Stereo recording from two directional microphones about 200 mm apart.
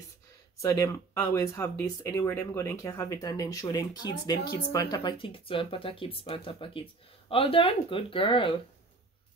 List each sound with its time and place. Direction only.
0.6 s speech: 15° left (ahead or behind)